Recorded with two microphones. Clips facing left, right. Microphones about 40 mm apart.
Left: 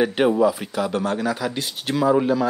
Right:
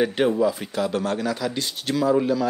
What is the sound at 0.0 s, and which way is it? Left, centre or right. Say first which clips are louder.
Speech: left 2 dB; centre.